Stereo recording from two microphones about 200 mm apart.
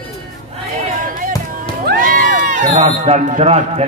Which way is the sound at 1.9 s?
45° right (ahead or behind).